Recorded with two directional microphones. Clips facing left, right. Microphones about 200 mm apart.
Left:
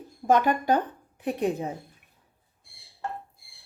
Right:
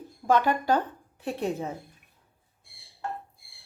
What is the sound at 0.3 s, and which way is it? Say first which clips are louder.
A woman's voice: left 1 dB; 20° left (ahead or behind).